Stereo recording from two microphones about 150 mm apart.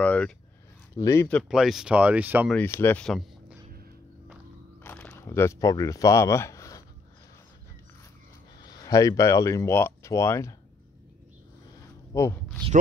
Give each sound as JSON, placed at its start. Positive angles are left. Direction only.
{"t": 0.0, "sound": "a sound", "side_deg": 10}
{"t": 0.9, "sound": "speech", "side_deg": 20}
{"t": 1.5, "sound": "speech", "side_deg": 0}
{"t": 2.5, "sound": "speech", "side_deg": 15}
{"t": 3.1, "sound": "a sound", "side_deg": 0}
{"t": 4.8, "sound": "speech", "side_deg": 15}
{"t": 8.6, "sound": "speech", "side_deg": 25}
{"t": 12.1, "sound": "speech", "side_deg": 20}